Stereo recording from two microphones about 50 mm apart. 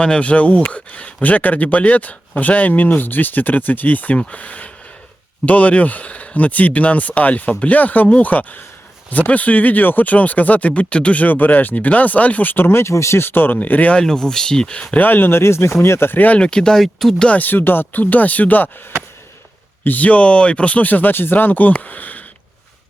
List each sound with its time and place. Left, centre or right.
0.0 s speech: left
12.9 s speech: left
13.6 s speech: left
14.0 s speech: centre
14.9 s speech: left
16.1 s speech: left
16.4 s speech: centre
17.2 s speech: left
17.4 s speech: left
18.0 s speech: left
19.8 s speech: left